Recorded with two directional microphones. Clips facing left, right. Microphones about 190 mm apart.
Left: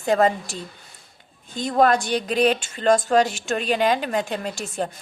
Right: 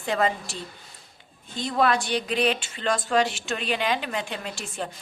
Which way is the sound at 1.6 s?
45° left (ahead or behind).